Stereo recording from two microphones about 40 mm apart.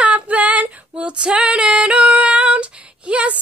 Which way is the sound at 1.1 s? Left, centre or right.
Right.